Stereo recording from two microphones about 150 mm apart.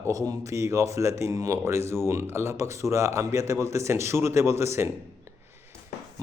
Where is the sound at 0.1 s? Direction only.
20° right (ahead or behind).